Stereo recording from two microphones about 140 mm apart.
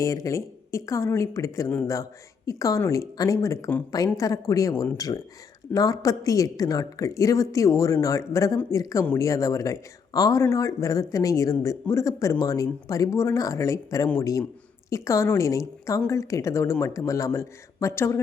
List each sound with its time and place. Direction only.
0.0 s a woman's voice: 20° left (ahead or behind)